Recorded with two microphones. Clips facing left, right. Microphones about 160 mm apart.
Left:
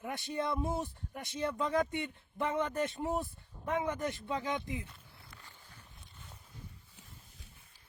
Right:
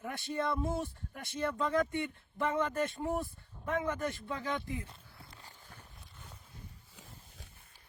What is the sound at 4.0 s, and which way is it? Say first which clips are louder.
Speech: even; 50° right (ahead or behind).